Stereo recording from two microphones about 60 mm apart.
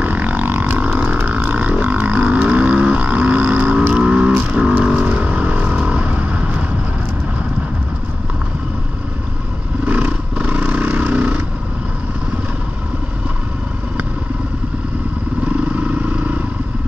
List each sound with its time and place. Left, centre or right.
0.0 s a sound: right
1.4 s didgeridoo: right
1.7 s boat: right
9.8 s vehicle: right
15.4 s vehicle: right